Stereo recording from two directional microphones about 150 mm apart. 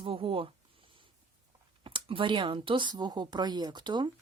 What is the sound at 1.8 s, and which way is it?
Speech, 35° right (ahead or behind).